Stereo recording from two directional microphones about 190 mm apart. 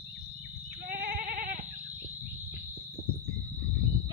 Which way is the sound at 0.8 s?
50° right (ahead or behind).